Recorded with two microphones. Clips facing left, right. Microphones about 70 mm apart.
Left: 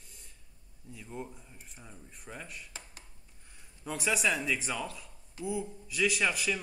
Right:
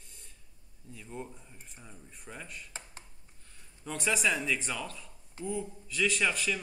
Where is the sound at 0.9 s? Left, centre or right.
Centre.